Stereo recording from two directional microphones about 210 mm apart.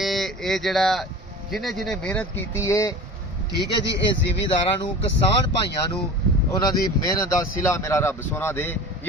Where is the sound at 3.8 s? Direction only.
55° left (ahead or behind).